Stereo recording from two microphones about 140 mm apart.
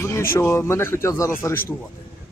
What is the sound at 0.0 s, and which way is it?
Speech, 20° left (ahead or behind).